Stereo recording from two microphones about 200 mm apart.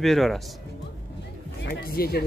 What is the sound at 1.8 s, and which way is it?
Speech, 50° left (ahead or behind).